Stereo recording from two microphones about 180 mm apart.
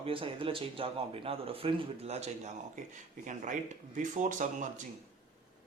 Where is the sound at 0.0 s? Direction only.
30° right (ahead or behind).